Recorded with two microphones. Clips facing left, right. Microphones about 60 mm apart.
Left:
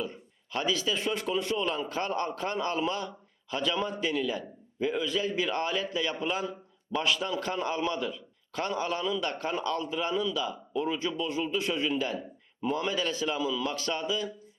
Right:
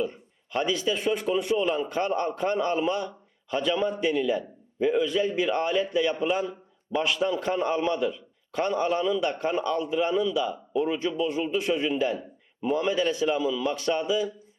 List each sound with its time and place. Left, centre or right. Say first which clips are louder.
0.5 s a man's voice: right 3 dB; centre
13.7 s a man's voice: right 5 dB; centre